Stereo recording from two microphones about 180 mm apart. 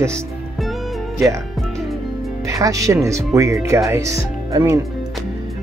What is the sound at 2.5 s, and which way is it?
Speech, 20° right (ahead or behind).